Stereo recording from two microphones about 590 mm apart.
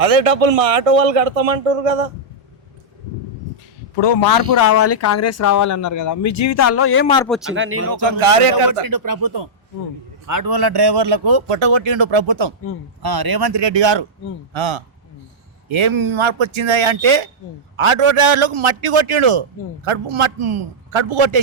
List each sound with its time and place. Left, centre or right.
0.0 s a man's voice: right
4.0 s speech: left
4.5 s speech: left; by 7.5 s centre
7.5 s speech: centre
8.2 s speech: right
8.9 s a man's voice: right